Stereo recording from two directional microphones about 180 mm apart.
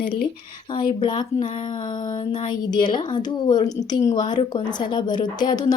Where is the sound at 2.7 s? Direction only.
25° left (ahead or behind).